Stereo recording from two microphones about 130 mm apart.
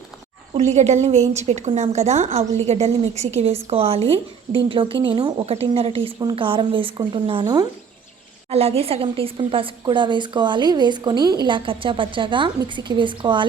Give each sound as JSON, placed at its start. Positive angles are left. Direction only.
{"t": 0.5, "sound": "a woman's voice", "side_deg": -60}
{"t": 8.4, "sound": "a woman's voice", "side_deg": -50}